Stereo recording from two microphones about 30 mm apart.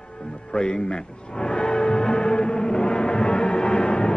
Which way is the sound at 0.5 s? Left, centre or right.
Left.